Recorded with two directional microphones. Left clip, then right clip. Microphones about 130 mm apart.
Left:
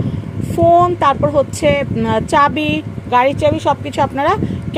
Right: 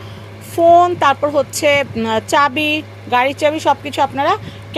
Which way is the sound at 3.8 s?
40° left (ahead or behind).